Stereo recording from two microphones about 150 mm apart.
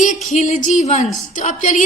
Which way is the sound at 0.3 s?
50° left (ahead or behind).